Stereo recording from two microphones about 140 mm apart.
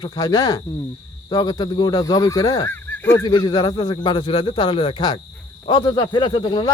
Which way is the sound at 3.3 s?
30° left (ahead or behind).